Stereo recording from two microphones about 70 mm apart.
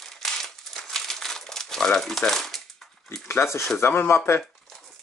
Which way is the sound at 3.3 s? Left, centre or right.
Left.